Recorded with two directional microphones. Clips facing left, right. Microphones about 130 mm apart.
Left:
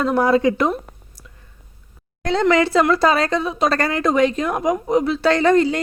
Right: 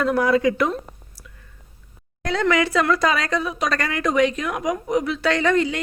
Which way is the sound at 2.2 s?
25° left (ahead or behind).